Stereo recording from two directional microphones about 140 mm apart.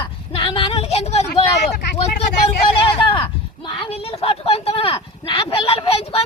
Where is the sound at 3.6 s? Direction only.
35° left (ahead or behind).